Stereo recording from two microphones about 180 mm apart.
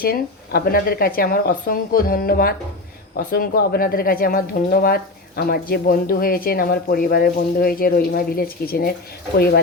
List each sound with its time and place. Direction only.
0.0 s speech: 55° left (ahead or behind)